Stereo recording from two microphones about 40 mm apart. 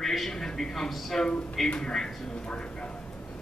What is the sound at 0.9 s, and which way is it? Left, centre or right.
Speech, centre.